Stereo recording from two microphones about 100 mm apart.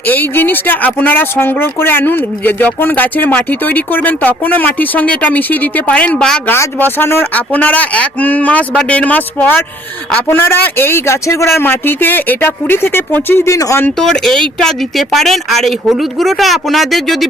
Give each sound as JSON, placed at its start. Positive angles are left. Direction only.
{"t": 0.1, "sound": "speech", "side_deg": 20}
{"t": 14.0, "sound": "speech", "side_deg": 5}